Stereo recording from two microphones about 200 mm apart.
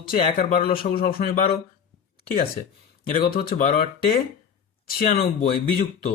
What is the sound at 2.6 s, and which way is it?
Speech, 35° left (ahead or behind).